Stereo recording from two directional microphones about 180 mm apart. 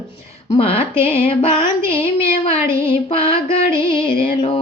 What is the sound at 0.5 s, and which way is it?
Music, 30° left (ahead or behind).